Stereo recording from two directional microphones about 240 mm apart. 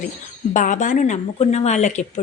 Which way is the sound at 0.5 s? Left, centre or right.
Left.